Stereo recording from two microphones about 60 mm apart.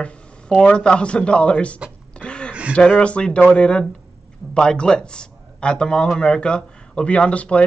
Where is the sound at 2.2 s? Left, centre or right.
Centre.